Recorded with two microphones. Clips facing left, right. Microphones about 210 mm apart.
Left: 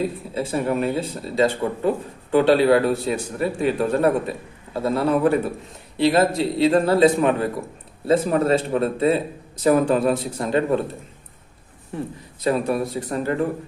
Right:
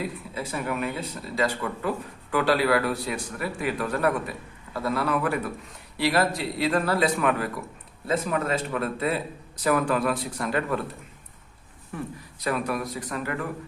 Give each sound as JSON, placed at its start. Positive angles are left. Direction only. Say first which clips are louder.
{"t": 0.0, "sound": "a man's voice", "louder": "left 7 dB", "side_deg": 30}
{"t": 11.9, "sound": "a man's voice", "louder": "left 5 dB", "side_deg": 30}